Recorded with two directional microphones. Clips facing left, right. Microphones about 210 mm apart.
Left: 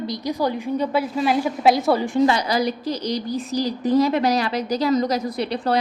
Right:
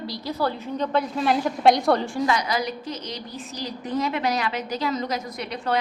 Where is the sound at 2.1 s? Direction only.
25° left (ahead or behind).